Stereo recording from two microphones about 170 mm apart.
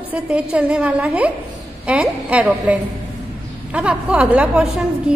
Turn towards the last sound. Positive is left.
turn(degrees=-5)  # may be behind; listen again after turning